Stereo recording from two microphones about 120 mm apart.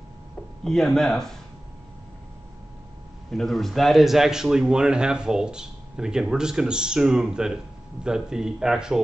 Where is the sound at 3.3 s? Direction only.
Centre (ahead or behind).